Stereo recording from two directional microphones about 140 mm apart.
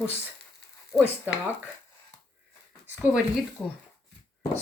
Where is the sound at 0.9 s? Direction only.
15° left (ahead or behind).